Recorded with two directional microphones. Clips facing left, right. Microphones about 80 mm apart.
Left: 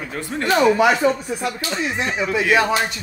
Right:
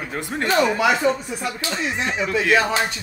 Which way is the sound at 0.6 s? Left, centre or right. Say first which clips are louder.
Left 4 dB; left.